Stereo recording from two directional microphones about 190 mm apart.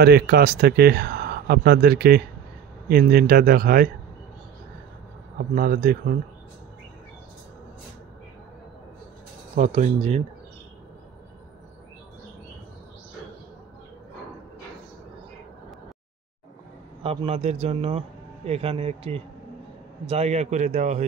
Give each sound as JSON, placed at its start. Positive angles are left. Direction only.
{"t": 0.0, "sound": "speech", "side_deg": -55}
{"t": 5.5, "sound": "speech", "side_deg": -45}
{"t": 9.6, "sound": "a man's voice", "side_deg": -35}
{"t": 17.0, "sound": "a man's voice", "side_deg": -30}